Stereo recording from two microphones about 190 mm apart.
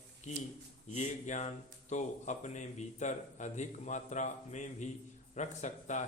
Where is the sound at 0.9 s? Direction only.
40° left (ahead or behind).